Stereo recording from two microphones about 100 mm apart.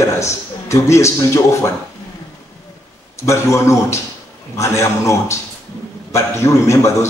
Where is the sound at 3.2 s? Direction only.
30° left (ahead or behind).